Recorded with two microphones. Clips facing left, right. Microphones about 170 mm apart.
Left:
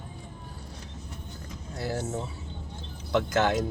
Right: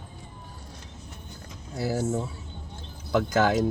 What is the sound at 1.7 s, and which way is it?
Speech, 5° right (ahead or behind).